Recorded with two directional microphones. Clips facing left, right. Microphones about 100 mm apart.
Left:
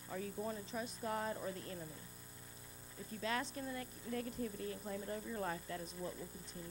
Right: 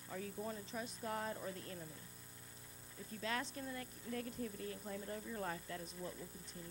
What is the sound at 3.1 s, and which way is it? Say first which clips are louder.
Speech: left 2 dB; 20° left (ahead or behind).